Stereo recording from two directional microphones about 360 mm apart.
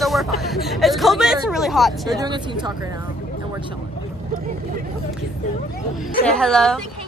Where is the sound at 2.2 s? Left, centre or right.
Centre.